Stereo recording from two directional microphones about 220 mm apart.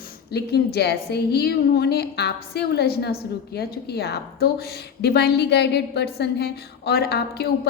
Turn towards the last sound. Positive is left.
turn(degrees=45)  # may be behind; listen again after turning